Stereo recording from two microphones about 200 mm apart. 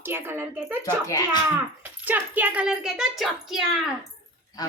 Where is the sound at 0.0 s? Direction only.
10° right (ahead or behind).